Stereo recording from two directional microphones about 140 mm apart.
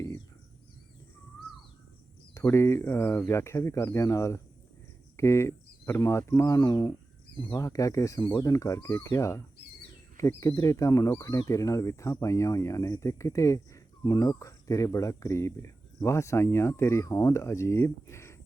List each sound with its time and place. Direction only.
2.3 s speech: 20° left (ahead or behind)